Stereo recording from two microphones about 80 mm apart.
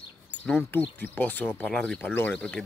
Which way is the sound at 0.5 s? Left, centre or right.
Left.